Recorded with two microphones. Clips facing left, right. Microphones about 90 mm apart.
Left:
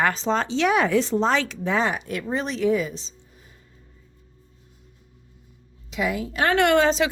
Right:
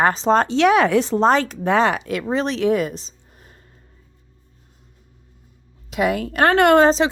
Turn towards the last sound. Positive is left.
turn(degrees=-35)  # may be behind; listen again after turning